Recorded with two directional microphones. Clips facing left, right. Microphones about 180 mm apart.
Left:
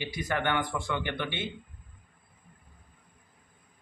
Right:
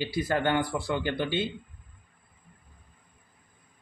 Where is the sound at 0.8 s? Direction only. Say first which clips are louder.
Right 4 dB; 20° left (ahead or behind).